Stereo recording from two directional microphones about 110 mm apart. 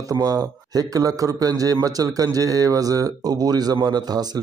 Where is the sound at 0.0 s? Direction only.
35° right (ahead or behind).